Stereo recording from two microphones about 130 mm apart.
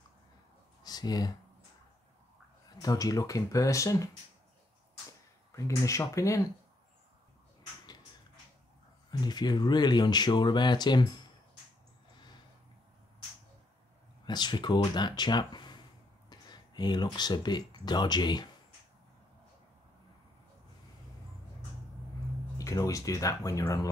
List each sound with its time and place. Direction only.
0.8 s speech: 30° left (ahead or behind)
2.8 s speech: 30° left (ahead or behind)
5.6 s speech: 25° left (ahead or behind)
9.1 s speech: 35° left (ahead or behind)
14.2 s speech: 35° left (ahead or behind)
16.3 s a sound: 35° left (ahead or behind)
17.8 s speech: 35° left (ahead or behind)
22.6 s speech: 25° left (ahead or behind)